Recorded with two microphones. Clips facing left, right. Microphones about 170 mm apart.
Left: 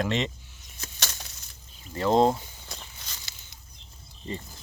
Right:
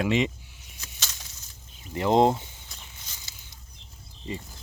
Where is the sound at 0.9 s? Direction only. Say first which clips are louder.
Left 5 dB; 65° left (ahead or behind).